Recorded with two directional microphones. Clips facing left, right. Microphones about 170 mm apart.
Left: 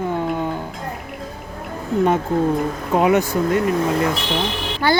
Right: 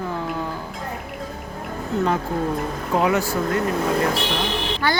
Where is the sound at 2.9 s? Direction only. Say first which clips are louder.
Left 4 dB; 20° left (ahead or behind).